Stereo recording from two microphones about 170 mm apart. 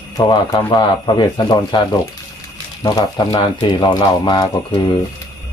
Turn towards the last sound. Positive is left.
turn(degrees=25)  # may be behind; listen again after turning